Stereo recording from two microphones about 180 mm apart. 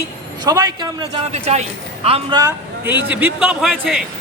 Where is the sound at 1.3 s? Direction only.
40° right (ahead or behind).